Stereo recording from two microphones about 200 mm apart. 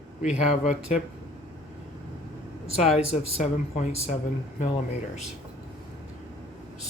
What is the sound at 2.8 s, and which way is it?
Speech, 35° left (ahead or behind).